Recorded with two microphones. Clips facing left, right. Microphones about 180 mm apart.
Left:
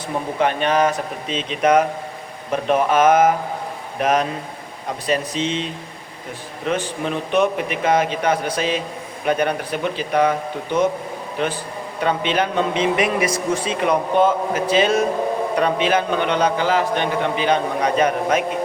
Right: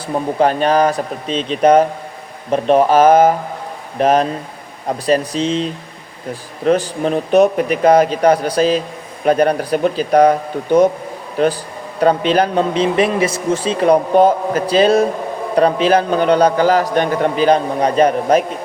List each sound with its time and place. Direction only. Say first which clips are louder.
0.3 s a man's voice: right 5 dB; 35° right (ahead or behind)
6.7 s a man's voice: right 8 dB; 35° right (ahead or behind)